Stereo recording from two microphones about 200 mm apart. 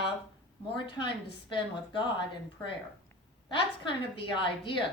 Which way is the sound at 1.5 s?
25° left (ahead or behind).